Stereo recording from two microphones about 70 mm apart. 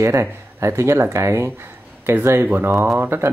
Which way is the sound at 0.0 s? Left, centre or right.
Right.